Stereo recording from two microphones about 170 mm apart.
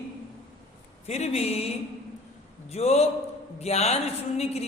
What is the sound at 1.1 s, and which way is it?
A man's voice, 40° left (ahead or behind).